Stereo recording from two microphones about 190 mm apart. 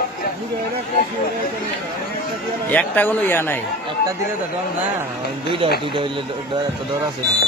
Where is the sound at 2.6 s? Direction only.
10° left (ahead or behind).